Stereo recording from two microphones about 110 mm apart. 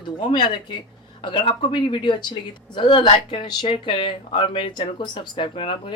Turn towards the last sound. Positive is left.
turn(degrees=55)  # may be behind; listen again after turning